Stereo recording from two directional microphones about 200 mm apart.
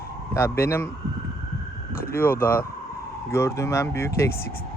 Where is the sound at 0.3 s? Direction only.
10° left (ahead or behind).